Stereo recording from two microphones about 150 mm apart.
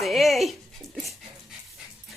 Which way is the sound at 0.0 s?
Centre (ahead or behind).